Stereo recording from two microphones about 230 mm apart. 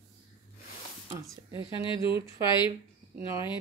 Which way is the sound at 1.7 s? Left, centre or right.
Left.